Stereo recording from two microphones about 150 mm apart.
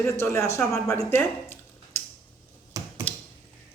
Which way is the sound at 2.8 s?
20° right (ahead or behind).